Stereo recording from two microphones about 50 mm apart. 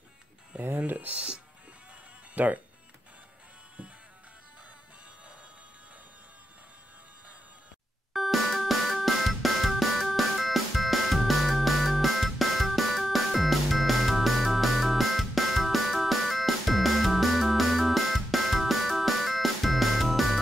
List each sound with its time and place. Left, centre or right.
0.6 s speech: right
0.9 s speech: right
8.1 s music: centre